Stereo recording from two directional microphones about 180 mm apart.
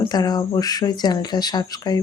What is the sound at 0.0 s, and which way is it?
Speech, 20° left (ahead or behind).